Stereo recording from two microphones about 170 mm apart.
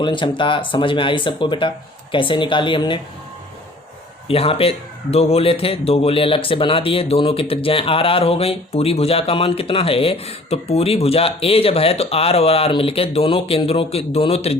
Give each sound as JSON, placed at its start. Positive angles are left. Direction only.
{"t": 0.0, "sound": "speech", "side_deg": 30}
{"t": 4.3, "sound": "speech", "side_deg": 35}